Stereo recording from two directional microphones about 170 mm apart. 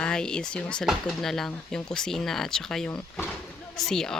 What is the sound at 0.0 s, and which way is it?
Speech, 5° left (ahead or behind).